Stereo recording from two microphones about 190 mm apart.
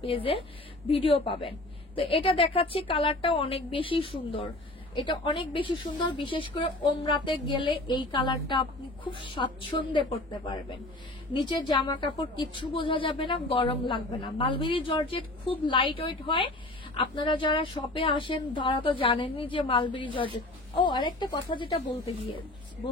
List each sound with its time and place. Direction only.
0.0 s a woman's voice: 30° left (ahead or behind)